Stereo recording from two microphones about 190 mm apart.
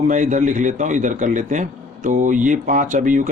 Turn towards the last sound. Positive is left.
turn(degrees=-45)  # may be behind; listen again after turning